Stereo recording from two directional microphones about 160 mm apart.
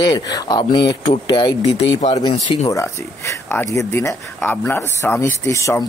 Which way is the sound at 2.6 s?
20° left (ahead or behind).